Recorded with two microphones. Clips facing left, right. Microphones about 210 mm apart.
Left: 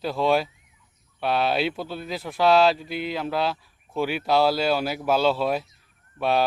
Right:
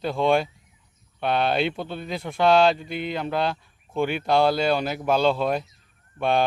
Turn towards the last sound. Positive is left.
turn(degrees=5)  # may be behind; listen again after turning